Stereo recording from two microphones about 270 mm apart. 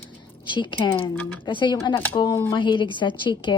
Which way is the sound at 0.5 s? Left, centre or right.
Centre.